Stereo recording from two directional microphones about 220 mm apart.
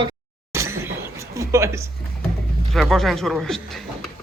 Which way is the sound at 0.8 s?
15° right (ahead or behind).